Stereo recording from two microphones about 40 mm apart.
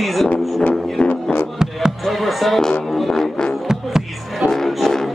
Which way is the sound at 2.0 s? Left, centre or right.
Centre.